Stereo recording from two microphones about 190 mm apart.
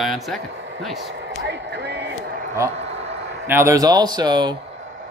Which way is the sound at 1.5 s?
65° right (ahead or behind).